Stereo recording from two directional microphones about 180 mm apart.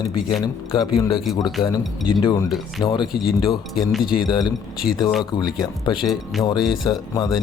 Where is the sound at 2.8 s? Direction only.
25° left (ahead or behind).